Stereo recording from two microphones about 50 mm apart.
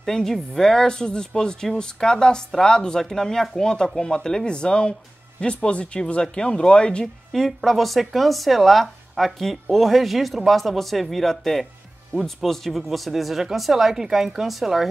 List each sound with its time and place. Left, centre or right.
0.0 s speech: centre
7.3 s speech: centre